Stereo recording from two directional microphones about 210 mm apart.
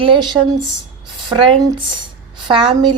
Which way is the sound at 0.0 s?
20° right (ahead or behind).